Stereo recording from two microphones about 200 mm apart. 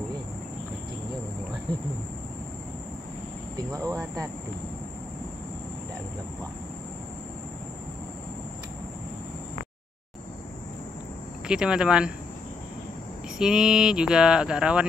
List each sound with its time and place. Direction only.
3.5 s speech: 15° right (ahead or behind)
11.4 s speech: 5° right (ahead or behind)
13.4 s speech: 5° right (ahead or behind)